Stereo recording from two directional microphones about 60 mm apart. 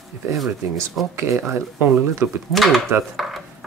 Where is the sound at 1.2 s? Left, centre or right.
Right.